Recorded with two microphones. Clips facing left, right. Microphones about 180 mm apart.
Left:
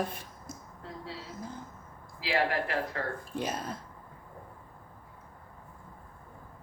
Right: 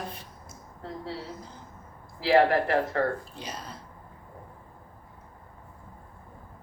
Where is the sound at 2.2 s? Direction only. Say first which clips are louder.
Right 8 dB; 50° right (ahead or behind).